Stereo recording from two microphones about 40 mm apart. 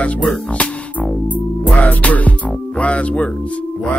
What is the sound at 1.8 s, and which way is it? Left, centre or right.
Music, left.